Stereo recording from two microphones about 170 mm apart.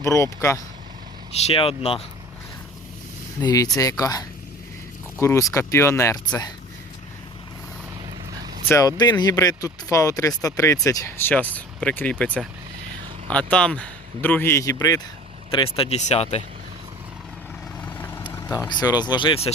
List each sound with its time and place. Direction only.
0.0 s a man's voice: 15° left (ahead or behind)
1.4 s speech: 35° left (ahead or behind)
3.4 s a man's voice: 20° left (ahead or behind)
8.7 s a man's voice: 20° left (ahead or behind)
15.5 s speech: 30° left (ahead or behind)
17.7 s vehicle: 10° left (ahead or behind)
18.7 s speech: 25° left (ahead or behind)